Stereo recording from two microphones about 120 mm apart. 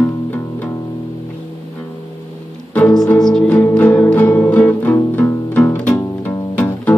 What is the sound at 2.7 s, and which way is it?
Music, 10° left (ahead or behind).